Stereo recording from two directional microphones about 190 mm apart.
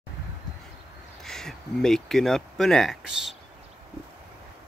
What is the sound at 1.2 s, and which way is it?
Speech, centre (ahead or behind).